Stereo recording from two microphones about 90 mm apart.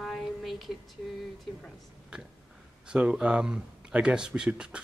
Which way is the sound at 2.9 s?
10° right (ahead or behind).